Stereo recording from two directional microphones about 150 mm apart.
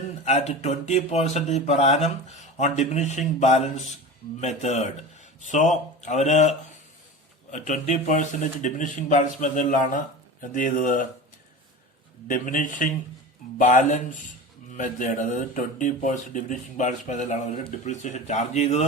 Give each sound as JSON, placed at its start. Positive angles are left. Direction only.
{"t": 0.3, "sound": "speech", "side_deg": 45}
{"t": 12.3, "sound": "speech", "side_deg": 60}